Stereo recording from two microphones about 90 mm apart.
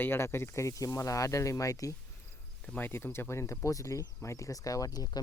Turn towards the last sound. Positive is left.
turn(degrees=45)  # may be behind; listen again after turning